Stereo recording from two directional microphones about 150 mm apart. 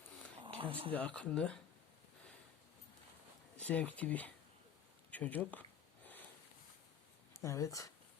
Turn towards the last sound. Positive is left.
turn(degrees=20)  # may be behind; listen again after turning